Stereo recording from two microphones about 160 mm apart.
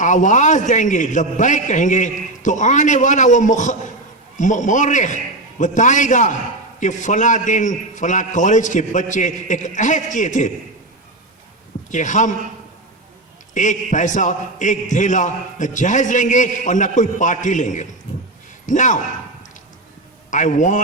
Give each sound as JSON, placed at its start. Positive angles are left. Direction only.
{"t": 0.0, "sound": "a man's voice", "side_deg": 50}
{"t": 11.9, "sound": "a man's voice", "side_deg": 50}
{"t": 13.5, "sound": "a man's voice", "side_deg": 50}
{"t": 20.3, "sound": "a man's voice", "side_deg": 50}